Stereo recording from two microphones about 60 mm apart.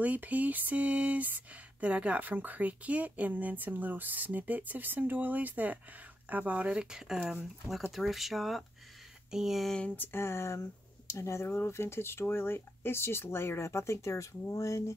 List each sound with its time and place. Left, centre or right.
0.0 s speech: right; by 8.6 s centre
9.3 s a sound: centre
10.1 s speech: left
11.4 s speech: left